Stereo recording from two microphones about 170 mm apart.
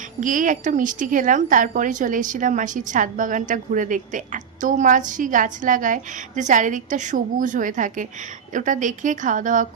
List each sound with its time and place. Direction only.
0.2 s a woman's voice: 50° right (ahead or behind)